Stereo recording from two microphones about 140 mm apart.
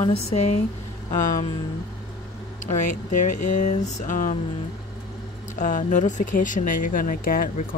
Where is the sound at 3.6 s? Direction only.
60° left (ahead or behind).